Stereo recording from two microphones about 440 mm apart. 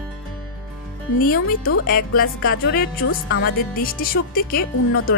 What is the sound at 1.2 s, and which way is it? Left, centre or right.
Speech, left.